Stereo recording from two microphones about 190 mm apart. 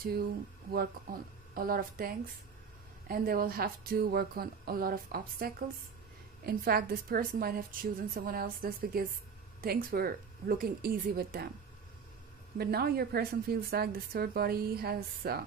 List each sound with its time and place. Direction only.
1.1 s a woman's voice: 50° right (ahead or behind)
12.5 s a woman's voice: 55° right (ahead or behind)